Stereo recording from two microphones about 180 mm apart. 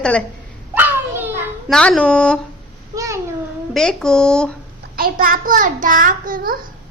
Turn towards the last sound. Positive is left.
turn(degrees=-50)  # may be behind; listen again after turning